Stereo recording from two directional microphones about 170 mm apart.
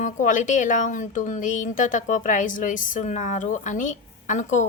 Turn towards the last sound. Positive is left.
turn(degrees=45)  # may be behind; listen again after turning